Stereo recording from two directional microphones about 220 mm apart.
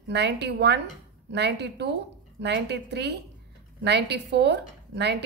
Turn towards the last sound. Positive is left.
turn(degrees=-50)  # may be behind; listen again after turning